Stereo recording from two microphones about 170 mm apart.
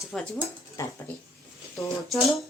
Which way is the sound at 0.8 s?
15° left (ahead or behind).